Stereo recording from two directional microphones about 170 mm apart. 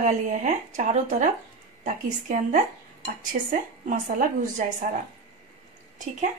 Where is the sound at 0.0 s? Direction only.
45° right (ahead or behind).